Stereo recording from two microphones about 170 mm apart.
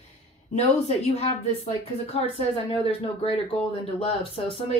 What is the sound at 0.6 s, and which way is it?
Speech, 40° left (ahead or behind).